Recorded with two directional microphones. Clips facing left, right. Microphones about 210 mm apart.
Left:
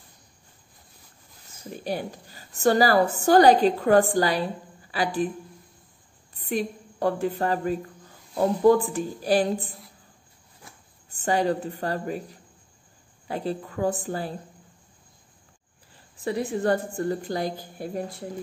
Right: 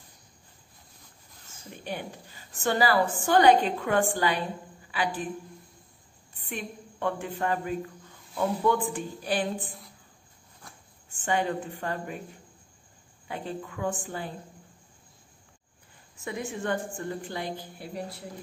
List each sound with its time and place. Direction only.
1.7 s a woman's voice: 35° left (ahead or behind)
6.3 s a woman's voice: 35° left (ahead or behind)
11.1 s a woman's voice: 40° left (ahead or behind)
13.3 s a woman's voice: 35° left (ahead or behind)
16.3 s a woman's voice: 35° left (ahead or behind)